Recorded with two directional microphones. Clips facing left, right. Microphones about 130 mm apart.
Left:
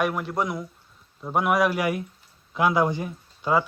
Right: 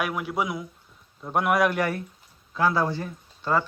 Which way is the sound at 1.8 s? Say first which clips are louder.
Left 1 dB; 15° left (ahead or behind).